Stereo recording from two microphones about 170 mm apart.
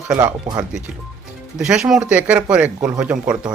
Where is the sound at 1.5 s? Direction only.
5° right (ahead or behind).